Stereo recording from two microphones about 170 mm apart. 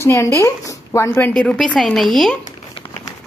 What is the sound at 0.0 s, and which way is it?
Speech, 15° left (ahead or behind).